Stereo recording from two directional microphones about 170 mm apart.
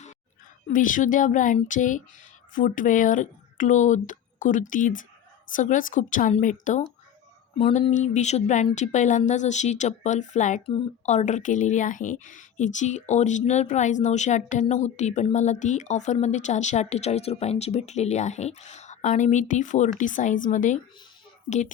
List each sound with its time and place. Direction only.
0.7 s a woman's voice: 50° left (ahead or behind)